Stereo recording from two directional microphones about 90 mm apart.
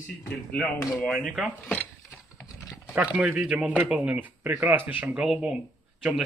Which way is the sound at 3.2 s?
5° right (ahead or behind).